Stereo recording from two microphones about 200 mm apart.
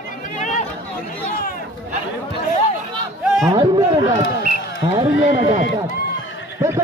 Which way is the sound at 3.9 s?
25° right (ahead or behind).